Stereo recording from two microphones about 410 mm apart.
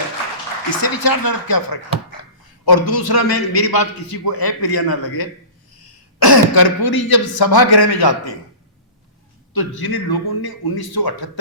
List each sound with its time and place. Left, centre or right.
0.8 s a sound: left
1.3 s a man's voice: left
9.5 s a man's voice: left